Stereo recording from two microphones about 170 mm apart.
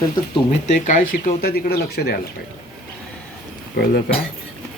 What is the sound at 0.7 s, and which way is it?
Speech, 50° left (ahead or behind).